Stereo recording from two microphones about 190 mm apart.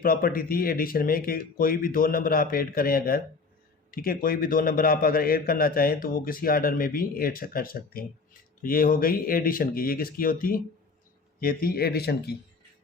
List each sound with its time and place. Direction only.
0.0 s a man's voice: 50° left (ahead or behind)